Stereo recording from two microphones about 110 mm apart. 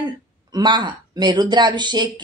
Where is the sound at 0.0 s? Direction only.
40° right (ahead or behind).